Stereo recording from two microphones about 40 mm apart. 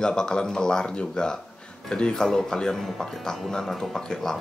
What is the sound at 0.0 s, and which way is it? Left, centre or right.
Speech, centre.